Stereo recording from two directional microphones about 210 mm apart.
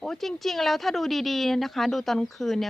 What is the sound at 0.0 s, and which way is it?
Speech, centre (ahead or behind).